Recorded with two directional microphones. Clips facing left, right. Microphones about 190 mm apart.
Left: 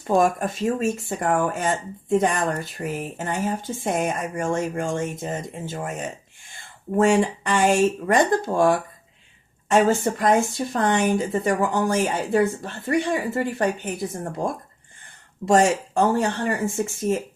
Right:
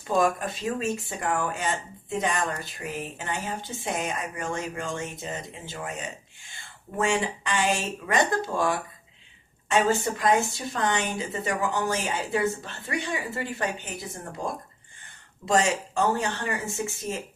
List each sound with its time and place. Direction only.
0.1 s speech: 50° left (ahead or behind)
15.4 s speech: 50° left (ahead or behind)